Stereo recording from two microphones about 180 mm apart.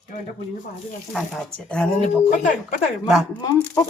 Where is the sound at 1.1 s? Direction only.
Centre (ahead or behind).